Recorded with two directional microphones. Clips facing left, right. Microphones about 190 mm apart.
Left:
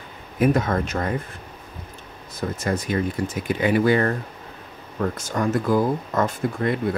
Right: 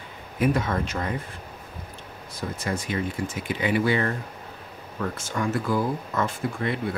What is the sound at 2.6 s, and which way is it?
Speech, 40° left (ahead or behind).